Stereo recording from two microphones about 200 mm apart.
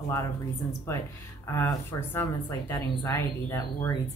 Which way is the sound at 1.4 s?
10° left (ahead or behind).